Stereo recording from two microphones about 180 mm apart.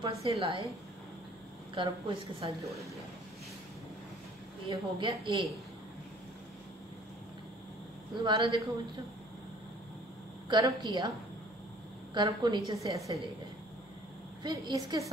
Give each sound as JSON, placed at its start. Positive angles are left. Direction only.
{"t": 0.0, "sound": "a woman's voice", "side_deg": -35}
{"t": 1.8, "sound": "a woman's voice", "side_deg": -25}
{"t": 4.6, "sound": "a woman's voice", "side_deg": -25}
{"t": 8.2, "sound": "a woman's voice", "side_deg": -25}
{"t": 10.5, "sound": "a woman's voice", "side_deg": -25}
{"t": 12.1, "sound": "a woman's voice", "side_deg": -25}
{"t": 14.4, "sound": "a woman's voice", "side_deg": -20}